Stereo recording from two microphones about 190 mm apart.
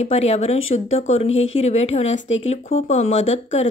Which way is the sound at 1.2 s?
90° left.